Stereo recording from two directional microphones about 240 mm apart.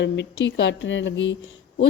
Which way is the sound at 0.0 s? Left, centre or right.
Left.